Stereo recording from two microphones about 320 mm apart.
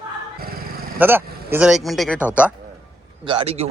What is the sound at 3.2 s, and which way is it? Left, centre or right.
Speech, centre.